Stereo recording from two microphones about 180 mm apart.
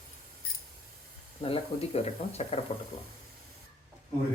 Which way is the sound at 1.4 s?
30° left (ahead or behind).